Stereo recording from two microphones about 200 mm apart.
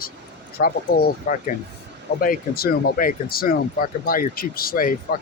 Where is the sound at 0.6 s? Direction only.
50° left (ahead or behind).